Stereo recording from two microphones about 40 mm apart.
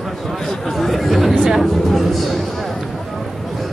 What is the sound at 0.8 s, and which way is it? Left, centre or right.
Chatter, centre.